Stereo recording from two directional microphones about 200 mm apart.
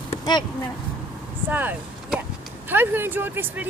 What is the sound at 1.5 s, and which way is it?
Speech, 10° right (ahead or behind).